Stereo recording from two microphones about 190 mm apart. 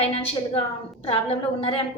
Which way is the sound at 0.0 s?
30° left (ahead or behind).